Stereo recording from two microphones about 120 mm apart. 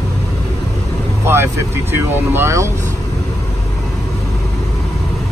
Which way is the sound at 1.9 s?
20° right (ahead or behind).